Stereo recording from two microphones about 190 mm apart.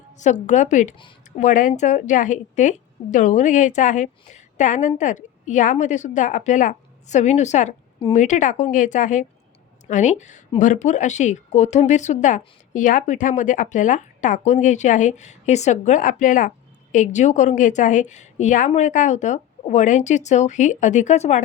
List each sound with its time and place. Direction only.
0.2 s a woman's voice: 40° left (ahead or behind)